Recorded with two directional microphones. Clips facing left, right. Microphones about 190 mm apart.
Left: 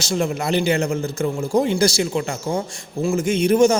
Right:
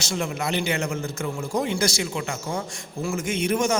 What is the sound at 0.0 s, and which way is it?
A man's voice, 35° left (ahead or behind).